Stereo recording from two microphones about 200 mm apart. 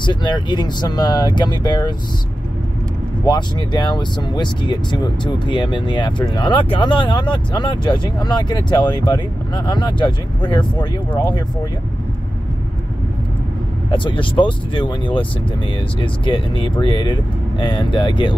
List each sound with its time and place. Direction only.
0.0 s speech: 25° left (ahead or behind)
3.3 s speech: 20° left (ahead or behind)
13.8 s speech: 25° left (ahead or behind)